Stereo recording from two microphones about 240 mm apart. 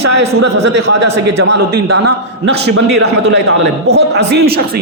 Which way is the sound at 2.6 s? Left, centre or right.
Right.